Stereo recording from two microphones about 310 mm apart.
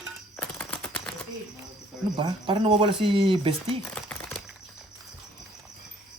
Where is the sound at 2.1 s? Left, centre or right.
Centre.